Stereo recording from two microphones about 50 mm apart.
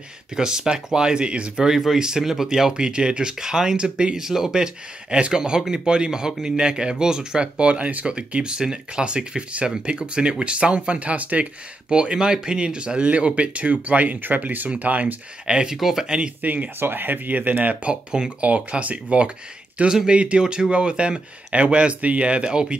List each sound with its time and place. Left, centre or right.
0.4 s speech: centre
1.7 s speech: centre; by 15.1 s right
15.4 s speech: centre
16.4 s speech: right
19.9 s speech: centre
20.2 s speech: right